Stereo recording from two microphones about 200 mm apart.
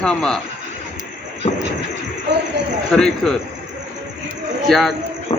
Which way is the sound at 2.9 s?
Centre (ahead or behind).